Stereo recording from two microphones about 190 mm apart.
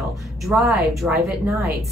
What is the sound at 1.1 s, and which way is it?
Speech, 15° right (ahead or behind).